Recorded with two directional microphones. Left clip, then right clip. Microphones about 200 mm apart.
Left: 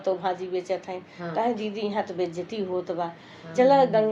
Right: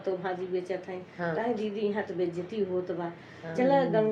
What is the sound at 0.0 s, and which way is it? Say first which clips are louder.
A woman's voice: left 6 dB; 35° left (ahead or behind).